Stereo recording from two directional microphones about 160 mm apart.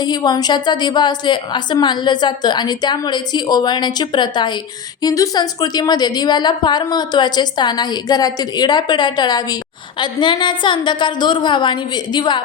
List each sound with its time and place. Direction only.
0.0 s a woman's voice: 25° left (ahead or behind)